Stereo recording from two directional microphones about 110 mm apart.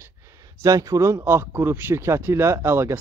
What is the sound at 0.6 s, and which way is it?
Speech, 30° right (ahead or behind).